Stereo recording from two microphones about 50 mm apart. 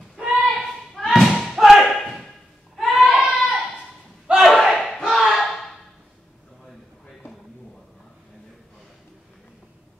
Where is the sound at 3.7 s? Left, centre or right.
Centre.